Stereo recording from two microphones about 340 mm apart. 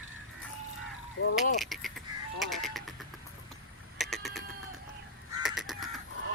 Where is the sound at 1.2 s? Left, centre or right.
Left.